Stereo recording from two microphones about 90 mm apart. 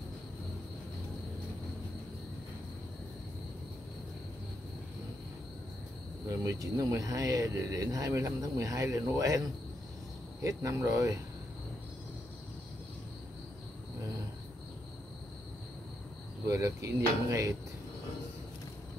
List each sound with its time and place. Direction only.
6.2 s speech: 40° right (ahead or behind)
10.4 s speech: 35° right (ahead or behind)
16.4 s speech: 30° right (ahead or behind)